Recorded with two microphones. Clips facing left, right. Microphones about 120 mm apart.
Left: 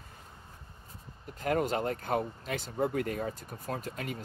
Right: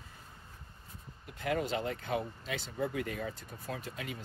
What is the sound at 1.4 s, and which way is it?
Speech, 45° left (ahead or behind).